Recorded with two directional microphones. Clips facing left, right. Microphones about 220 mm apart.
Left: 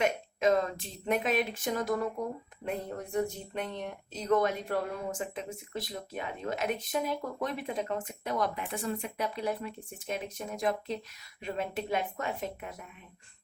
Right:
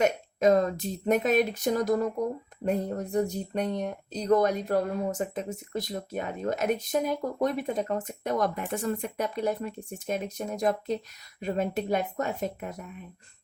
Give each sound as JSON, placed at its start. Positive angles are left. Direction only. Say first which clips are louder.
{"t": 0.0, "sound": "speech", "louder": "right 4 dB", "side_deg": -40}